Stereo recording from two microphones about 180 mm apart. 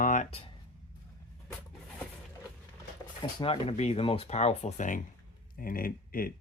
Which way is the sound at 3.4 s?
30° left (ahead or behind).